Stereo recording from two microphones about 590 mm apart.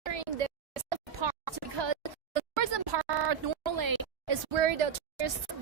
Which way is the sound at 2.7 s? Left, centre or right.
Right.